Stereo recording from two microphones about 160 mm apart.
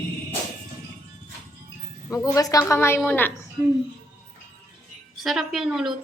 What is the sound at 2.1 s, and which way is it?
A woman's voice, 20° left (ahead or behind).